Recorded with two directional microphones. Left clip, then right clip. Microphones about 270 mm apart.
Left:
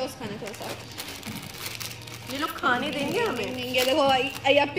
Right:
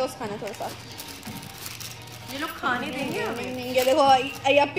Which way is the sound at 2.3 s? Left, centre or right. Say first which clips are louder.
Left 2 dB; centre.